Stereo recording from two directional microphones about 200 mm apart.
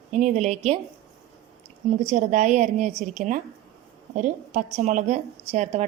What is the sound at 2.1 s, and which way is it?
A woman's voice, 40° right (ahead or behind).